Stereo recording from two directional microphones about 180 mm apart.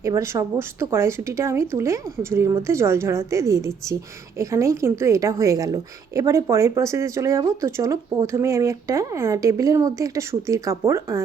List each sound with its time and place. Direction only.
0.0 s a woman's voice: 15° right (ahead or behind)